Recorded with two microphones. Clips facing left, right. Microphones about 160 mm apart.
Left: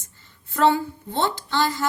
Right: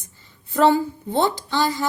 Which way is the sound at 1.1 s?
15° right (ahead or behind).